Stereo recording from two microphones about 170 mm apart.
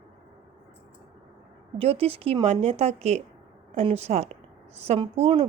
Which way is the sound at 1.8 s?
35° right (ahead or behind).